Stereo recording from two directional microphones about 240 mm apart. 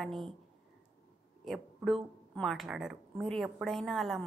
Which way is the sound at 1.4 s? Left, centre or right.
Centre.